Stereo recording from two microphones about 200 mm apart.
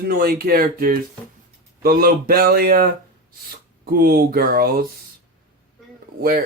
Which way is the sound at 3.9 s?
50° right (ahead or behind).